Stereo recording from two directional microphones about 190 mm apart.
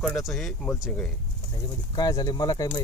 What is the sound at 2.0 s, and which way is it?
Speech, 20° left (ahead or behind).